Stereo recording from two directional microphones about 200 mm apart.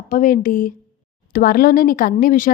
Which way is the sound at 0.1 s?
40° left (ahead or behind).